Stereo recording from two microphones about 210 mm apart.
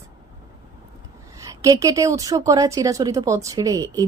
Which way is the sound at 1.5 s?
15° right (ahead or behind).